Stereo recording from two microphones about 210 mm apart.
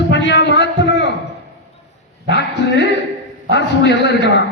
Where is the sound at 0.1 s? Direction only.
55° left (ahead or behind).